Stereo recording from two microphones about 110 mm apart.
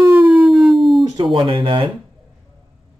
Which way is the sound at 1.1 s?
50° right (ahead or behind).